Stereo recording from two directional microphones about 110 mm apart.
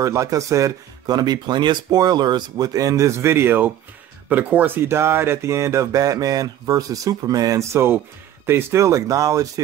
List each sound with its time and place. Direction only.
0.0 s speech: 30° right (ahead or behind)